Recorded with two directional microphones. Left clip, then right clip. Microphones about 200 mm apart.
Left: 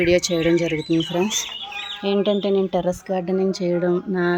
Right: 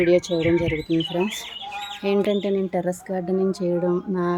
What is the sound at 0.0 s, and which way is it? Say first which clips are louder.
Speech: left 1 dB; centre (ahead or behind).